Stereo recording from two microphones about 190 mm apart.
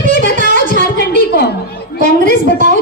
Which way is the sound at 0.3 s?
40° right (ahead or behind).